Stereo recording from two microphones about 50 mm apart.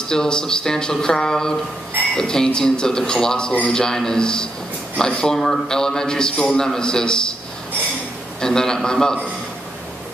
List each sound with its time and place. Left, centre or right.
0.1 s a man's voice: centre
8.4 s a man's voice: centre